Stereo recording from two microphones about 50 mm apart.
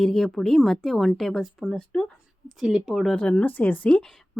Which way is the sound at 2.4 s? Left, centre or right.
Centre.